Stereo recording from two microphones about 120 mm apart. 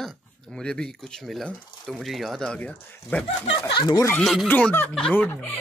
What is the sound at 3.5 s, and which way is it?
Speech, 35° left (ahead or behind).